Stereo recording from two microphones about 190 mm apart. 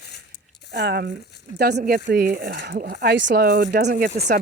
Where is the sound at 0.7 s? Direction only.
60° right (ahead or behind).